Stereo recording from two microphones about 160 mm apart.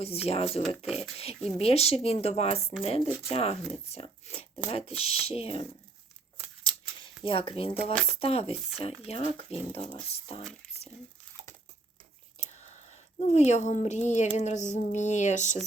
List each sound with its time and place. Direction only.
0.0 s speech: 40° left (ahead or behind)
7.3 s speech: 35° left (ahead or behind)
12.4 s speech: 45° left (ahead or behind)